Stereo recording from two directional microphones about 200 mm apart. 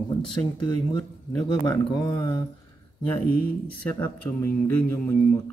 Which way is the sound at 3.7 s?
10° left (ahead or behind).